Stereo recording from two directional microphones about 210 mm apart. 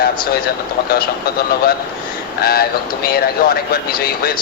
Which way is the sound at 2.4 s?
45° left (ahead or behind).